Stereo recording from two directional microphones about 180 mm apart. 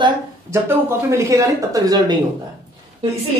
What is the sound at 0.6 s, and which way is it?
Speech, 15° right (ahead or behind).